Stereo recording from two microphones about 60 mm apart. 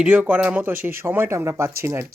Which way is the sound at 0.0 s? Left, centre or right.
Right.